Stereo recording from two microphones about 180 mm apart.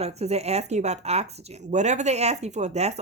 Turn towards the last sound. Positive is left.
turn(degrees=-35)  # may be behind; listen again after turning